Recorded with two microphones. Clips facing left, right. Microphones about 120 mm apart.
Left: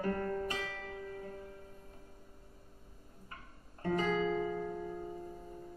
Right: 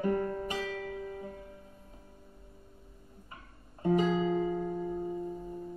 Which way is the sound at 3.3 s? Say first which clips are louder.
Even; 20° right (ahead or behind).